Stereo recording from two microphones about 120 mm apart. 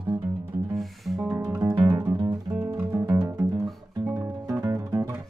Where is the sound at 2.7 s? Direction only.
20° right (ahead or behind).